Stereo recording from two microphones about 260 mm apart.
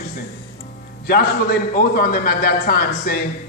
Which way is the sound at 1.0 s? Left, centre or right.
Left.